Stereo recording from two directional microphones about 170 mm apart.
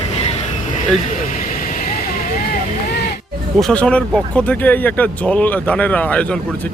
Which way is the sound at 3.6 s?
5° left (ahead or behind).